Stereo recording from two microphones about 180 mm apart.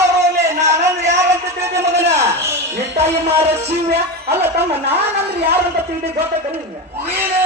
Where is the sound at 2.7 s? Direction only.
35° right (ahead or behind).